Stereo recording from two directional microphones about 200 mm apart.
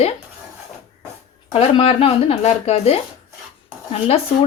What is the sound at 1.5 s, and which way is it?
Speech, 25° left (ahead or behind).